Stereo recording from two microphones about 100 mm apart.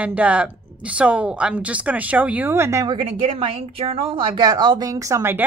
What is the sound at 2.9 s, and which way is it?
A woman's voice, 60° right (ahead or behind).